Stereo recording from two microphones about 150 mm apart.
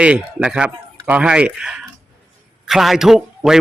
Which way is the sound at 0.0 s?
5° right (ahead or behind).